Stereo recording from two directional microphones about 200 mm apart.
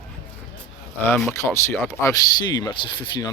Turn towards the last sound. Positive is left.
turn(degrees=25)  # may be behind; listen again after turning